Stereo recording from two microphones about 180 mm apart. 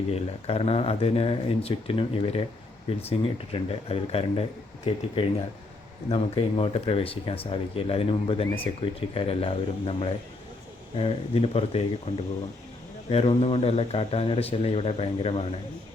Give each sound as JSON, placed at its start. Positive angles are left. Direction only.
{"t": 0.1, "sound": "speech", "side_deg": 35}
{"t": 13.1, "sound": "speech", "side_deg": 35}